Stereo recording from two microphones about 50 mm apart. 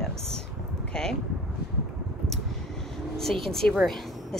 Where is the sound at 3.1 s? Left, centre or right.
Centre.